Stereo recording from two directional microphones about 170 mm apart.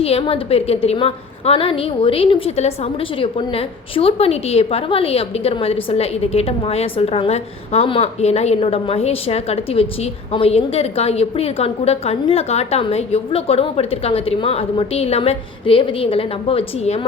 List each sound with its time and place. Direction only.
0.0 s a woman's voice: 35° left (ahead or behind)